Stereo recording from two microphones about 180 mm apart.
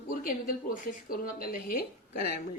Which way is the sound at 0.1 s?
50° left (ahead or behind).